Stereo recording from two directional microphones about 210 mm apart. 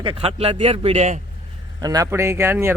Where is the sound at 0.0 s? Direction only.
25° right (ahead or behind).